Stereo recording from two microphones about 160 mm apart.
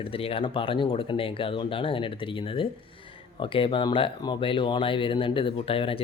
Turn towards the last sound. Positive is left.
turn(degrees=35)  # may be behind; listen again after turning